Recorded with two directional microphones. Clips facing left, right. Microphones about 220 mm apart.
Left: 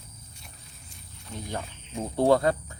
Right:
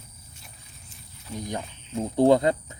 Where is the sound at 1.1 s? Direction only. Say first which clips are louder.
Right 4 dB; centre (ahead or behind).